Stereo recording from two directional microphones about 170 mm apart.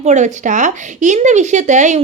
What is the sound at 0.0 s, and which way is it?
Speech, 45° right (ahead or behind).